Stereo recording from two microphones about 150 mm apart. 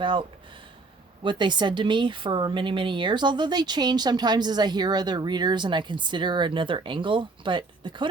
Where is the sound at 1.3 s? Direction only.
30° right (ahead or behind).